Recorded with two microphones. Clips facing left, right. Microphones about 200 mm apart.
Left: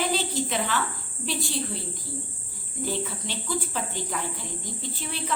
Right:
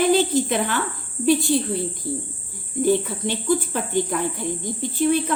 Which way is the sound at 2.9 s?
55° right (ahead or behind).